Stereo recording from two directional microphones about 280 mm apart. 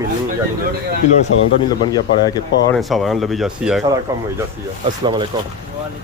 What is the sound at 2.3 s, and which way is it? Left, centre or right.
Speech, centre.